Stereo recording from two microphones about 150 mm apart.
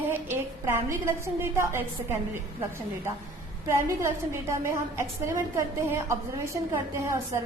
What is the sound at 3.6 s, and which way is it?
A woman's voice, 20° right (ahead or behind).